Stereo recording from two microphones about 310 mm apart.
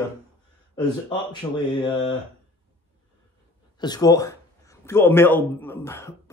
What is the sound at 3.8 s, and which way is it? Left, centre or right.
A man's voice, centre.